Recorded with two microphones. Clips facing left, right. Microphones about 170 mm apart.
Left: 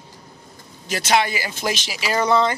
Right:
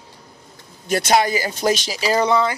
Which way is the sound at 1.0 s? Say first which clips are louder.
Right 1 dB; 40° right (ahead or behind).